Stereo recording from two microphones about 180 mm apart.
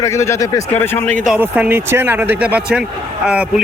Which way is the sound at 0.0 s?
15° left (ahead or behind).